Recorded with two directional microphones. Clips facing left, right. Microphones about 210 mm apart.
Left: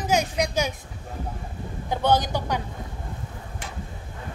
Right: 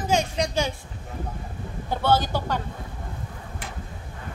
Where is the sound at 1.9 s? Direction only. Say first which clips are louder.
Even; 15° left (ahead or behind).